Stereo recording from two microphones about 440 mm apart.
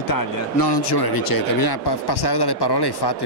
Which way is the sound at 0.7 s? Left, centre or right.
Left.